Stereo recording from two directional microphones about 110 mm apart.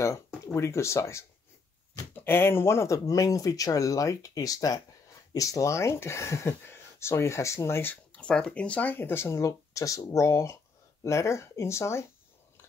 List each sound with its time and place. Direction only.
0.6 s speech: 25° left (ahead or behind)